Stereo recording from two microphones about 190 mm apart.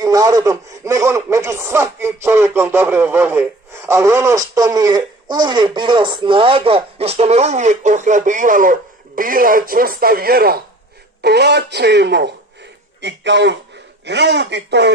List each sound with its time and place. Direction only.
0.0 s speech: 20° right (ahead or behind); by 14.9 s 65° right (ahead or behind)